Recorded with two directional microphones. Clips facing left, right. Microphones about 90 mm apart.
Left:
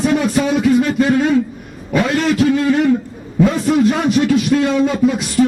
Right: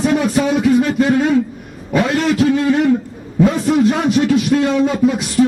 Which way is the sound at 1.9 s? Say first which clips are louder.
Even; 20° right (ahead or behind).